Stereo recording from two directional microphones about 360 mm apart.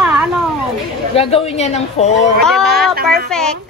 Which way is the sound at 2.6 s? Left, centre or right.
Right.